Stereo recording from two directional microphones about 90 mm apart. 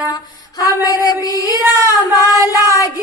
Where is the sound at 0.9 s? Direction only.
40° left (ahead or behind).